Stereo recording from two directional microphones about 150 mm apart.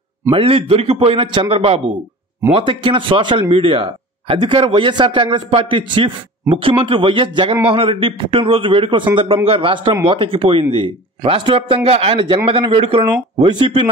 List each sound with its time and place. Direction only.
0.3 s a man's voice: 40° right (ahead or behind)